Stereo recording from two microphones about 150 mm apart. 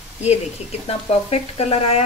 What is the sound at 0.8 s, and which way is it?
Frying, 40° left (ahead or behind).